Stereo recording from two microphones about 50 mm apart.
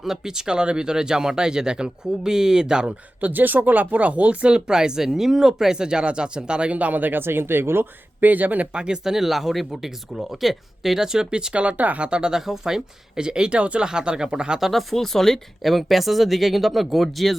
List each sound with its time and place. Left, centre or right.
0.0 s speech: centre
3.2 s speech: right
8.7 s speech: centre
14.6 s speech: centre